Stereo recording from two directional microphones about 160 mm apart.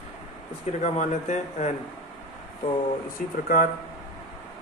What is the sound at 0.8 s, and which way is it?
Speech, 50° left (ahead or behind).